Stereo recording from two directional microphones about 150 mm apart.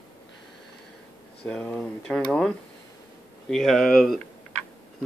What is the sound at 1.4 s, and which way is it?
Speech, 5° left (ahead or behind).